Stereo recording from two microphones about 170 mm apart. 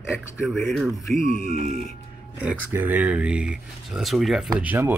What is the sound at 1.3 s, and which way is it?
Speech, 45° right (ahead or behind).